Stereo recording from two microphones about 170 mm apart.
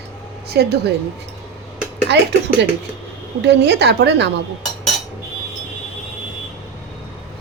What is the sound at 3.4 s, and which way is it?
Speech, 85° right.